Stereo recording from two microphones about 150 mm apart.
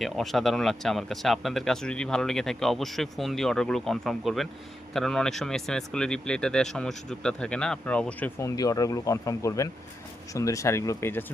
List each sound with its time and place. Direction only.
0.0 s speech: centre (ahead or behind)
8.4 s speech: 20° left (ahead or behind)